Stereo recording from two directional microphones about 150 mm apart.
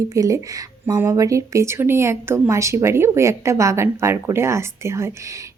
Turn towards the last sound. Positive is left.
turn(degrees=-20)  # may be behind; listen again after turning